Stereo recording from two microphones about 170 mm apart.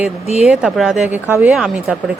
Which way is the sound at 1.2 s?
15° right (ahead or behind).